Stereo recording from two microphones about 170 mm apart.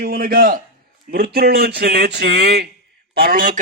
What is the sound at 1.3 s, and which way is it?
Speech, 70° right (ahead or behind).